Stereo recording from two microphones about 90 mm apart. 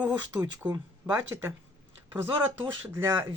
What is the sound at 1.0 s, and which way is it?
Speech, 25° right (ahead or behind).